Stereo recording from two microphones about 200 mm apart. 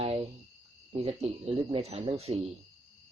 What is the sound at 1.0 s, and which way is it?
Speech, 30° right (ahead or behind).